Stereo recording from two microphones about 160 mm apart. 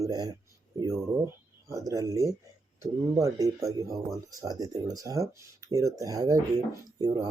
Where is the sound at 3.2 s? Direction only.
20° right (ahead or behind).